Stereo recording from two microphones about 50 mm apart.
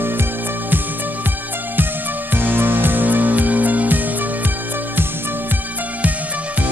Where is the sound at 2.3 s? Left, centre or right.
Right.